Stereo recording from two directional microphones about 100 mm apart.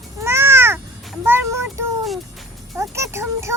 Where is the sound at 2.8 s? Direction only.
30° right (ahead or behind).